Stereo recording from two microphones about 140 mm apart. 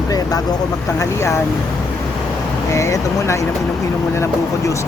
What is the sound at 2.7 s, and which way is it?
Speech, 25° left (ahead or behind).